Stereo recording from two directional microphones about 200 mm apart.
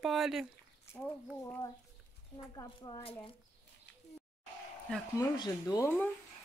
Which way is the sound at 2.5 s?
20° left (ahead or behind).